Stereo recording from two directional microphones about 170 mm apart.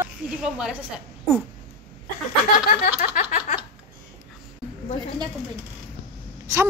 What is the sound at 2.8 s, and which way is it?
Speech, 50° left (ahead or behind).